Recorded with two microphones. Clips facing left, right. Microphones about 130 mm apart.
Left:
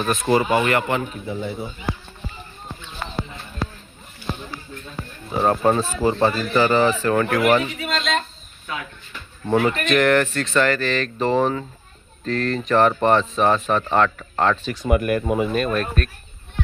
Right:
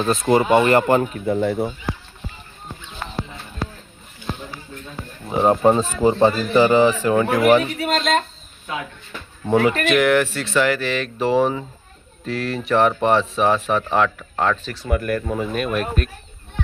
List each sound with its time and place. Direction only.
0.0 s speech: 25° right (ahead or behind)
1.2 s speech: 55° right (ahead or behind)
5.3 s speech: 15° right (ahead or behind)
7.8 s speech: 45° right (ahead or behind)
9.9 s speech: 5° right (ahead or behind)
14.7 s speech: 15° left (ahead or behind)
15.5 s speech: 10° right (ahead or behind)